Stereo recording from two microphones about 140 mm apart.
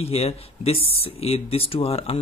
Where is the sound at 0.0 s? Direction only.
45° left (ahead or behind).